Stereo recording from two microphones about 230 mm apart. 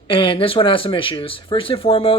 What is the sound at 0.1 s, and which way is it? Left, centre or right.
Speech, left.